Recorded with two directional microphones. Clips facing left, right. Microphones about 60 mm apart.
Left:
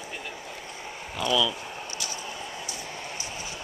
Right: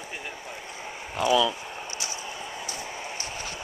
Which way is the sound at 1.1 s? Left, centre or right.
Right.